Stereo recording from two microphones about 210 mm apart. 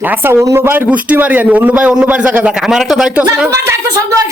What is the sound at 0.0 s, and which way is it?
A man's voice, 10° right (ahead or behind).